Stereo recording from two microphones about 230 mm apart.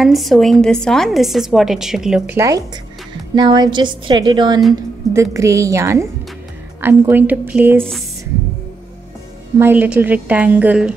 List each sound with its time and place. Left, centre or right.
0.0 s a woman's voice: centre
9.6 s a woman's voice: centre